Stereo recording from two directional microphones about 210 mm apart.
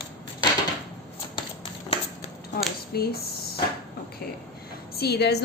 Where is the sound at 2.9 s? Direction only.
50° left (ahead or behind).